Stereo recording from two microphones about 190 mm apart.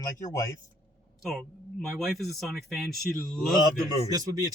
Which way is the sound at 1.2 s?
Centre (ahead or behind).